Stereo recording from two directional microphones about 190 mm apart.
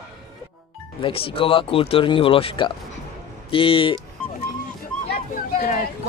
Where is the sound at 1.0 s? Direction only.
30° left (ahead or behind).